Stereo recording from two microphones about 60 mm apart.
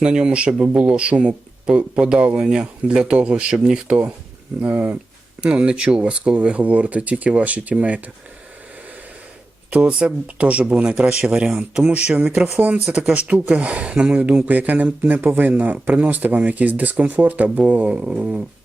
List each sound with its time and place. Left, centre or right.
0.0 s speech: centre
4.6 s speech: right
5.4 s speech: centre
9.6 s speech: right
11.9 s speech: right